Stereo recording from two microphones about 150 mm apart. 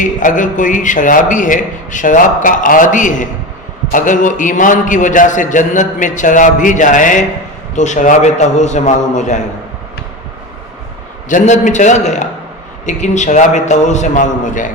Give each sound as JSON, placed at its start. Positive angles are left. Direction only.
{"t": 0.0, "sound": "a man's voice", "side_deg": 60}
{"t": 11.3, "sound": "a man's voice", "side_deg": 55}